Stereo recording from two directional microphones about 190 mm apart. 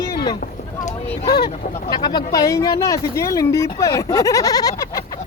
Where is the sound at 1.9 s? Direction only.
20° left (ahead or behind).